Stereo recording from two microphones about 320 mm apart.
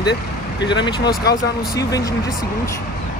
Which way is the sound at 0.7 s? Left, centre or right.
Centre.